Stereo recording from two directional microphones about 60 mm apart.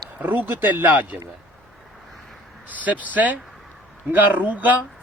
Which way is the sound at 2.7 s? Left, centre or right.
Right.